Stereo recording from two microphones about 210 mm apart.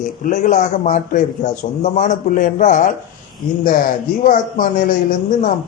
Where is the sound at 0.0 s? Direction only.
35° left (ahead or behind).